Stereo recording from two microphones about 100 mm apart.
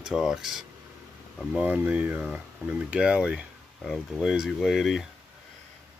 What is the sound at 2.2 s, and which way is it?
Speech, 10° right (ahead or behind).